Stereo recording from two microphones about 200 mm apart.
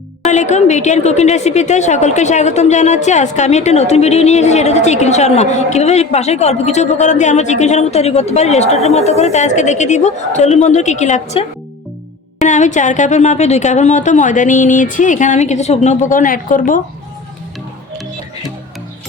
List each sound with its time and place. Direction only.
0.3 s a woman's voice: 35° left (ahead or behind)